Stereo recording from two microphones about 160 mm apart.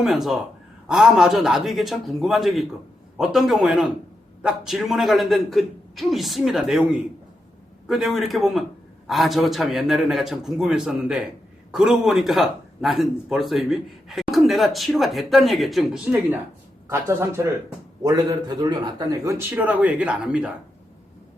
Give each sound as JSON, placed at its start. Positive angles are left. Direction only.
{"t": 0.0, "sound": "speech", "side_deg": 0}
{"t": 16.9, "sound": "a man's voice", "side_deg": -15}